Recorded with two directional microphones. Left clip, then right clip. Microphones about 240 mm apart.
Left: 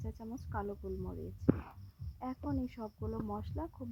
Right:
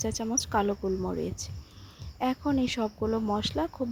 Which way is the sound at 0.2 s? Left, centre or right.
Right.